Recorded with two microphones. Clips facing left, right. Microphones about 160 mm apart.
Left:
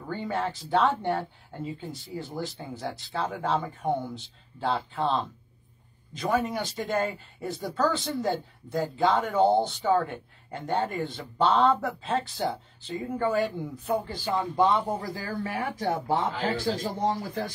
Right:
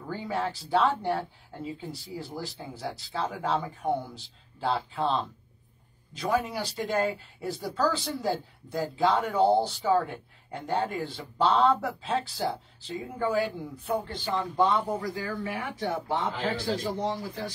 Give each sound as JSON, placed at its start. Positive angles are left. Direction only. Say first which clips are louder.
{"t": 0.1, "sound": "speech", "louder": "left 1 dB", "side_deg": 0}
{"t": 15.1, "sound": "speech", "louder": "left 1 dB", "side_deg": 35}